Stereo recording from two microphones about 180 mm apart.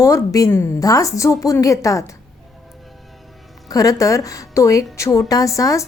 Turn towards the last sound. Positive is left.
turn(degrees=20)  # may be behind; listen again after turning